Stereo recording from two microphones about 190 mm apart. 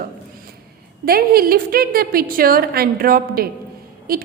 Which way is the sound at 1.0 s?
55° right (ahead or behind).